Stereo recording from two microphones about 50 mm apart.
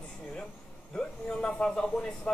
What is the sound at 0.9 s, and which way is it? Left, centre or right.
Speech, centre.